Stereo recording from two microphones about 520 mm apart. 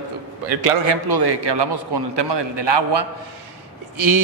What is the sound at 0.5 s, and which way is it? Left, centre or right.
Speech, right.